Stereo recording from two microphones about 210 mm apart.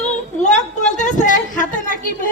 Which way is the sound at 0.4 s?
35° left (ahead or behind).